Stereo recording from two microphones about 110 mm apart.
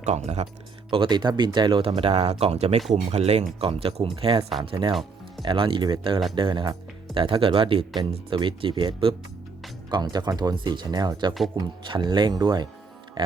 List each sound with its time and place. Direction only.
0.0 s speech: 85° right
0.9 s speech: 50° right (ahead or behind)
9.9 s speech: 40° right (ahead or behind)